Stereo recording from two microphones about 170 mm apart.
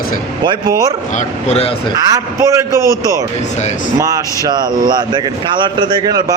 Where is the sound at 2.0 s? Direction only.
20° right (ahead or behind).